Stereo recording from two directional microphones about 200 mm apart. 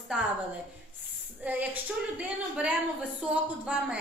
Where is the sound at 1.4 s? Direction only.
10° right (ahead or behind).